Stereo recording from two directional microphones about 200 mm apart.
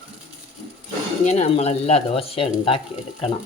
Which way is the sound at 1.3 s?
30° left (ahead or behind).